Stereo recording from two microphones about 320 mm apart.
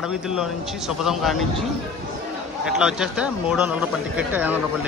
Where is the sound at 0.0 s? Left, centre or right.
Centre.